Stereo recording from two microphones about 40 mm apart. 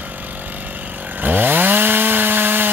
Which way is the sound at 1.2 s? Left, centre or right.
Right.